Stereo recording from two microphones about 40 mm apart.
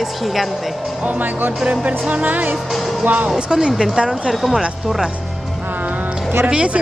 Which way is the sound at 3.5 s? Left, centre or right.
Centre.